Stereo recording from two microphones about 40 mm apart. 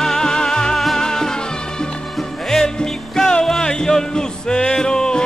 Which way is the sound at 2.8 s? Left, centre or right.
Centre.